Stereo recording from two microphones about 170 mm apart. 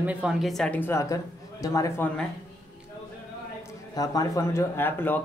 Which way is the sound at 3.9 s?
20° left (ahead or behind).